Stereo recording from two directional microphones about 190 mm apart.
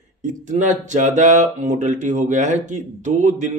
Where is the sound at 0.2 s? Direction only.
40° right (ahead or behind).